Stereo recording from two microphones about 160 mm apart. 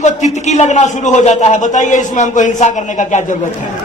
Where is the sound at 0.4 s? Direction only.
45° left (ahead or behind).